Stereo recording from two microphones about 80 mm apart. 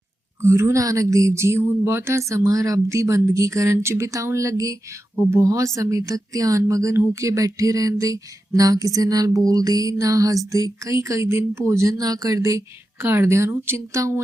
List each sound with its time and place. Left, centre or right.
0.4 s speech: right
5.1 s speech: right
7.1 s a sound: right
13.0 s speech: right